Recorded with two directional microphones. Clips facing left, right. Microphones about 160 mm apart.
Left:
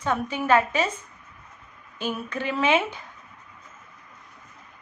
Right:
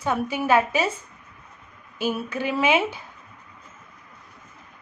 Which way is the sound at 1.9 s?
10° right (ahead or behind).